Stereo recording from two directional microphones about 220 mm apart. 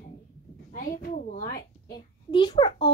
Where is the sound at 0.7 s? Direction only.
40° left (ahead or behind).